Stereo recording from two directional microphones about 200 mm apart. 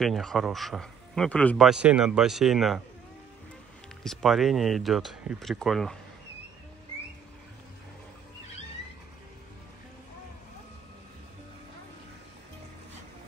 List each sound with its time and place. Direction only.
0.0 s speech: centre (ahead or behind)
4.0 s speech: centre (ahead or behind)